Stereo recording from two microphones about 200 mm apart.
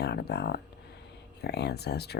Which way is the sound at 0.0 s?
55° left (ahead or behind).